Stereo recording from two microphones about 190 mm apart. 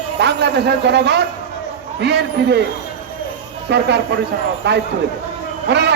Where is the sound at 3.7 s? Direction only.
60° right (ahead or behind).